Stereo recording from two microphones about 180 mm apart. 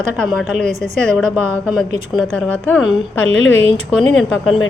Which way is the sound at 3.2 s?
90° left.